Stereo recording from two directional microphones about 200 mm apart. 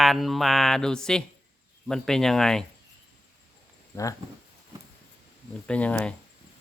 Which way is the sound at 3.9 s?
15° left (ahead or behind).